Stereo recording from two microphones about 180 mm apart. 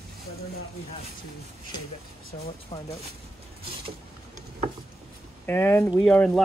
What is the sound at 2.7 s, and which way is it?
Speech, 25° left (ahead or behind).